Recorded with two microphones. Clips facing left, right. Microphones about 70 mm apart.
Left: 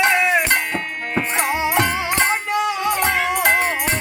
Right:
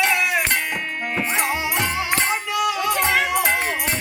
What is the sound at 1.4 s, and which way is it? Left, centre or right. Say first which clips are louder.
Music: left 7 dB; left.